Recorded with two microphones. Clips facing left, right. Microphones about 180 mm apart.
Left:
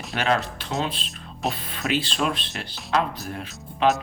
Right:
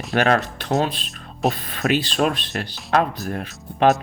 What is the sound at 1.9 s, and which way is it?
Speech, 50° right (ahead or behind).